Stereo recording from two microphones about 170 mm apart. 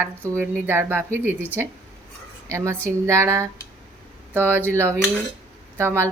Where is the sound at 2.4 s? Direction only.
15° right (ahead or behind).